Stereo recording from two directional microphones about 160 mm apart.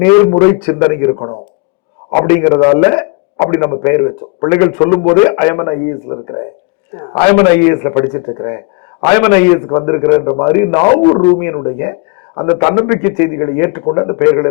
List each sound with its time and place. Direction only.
0.0 s a man's voice: 15° left (ahead or behind)